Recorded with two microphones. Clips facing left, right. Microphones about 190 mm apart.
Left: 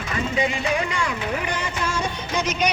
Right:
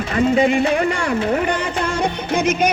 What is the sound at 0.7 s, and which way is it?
Music, 55° right (ahead or behind).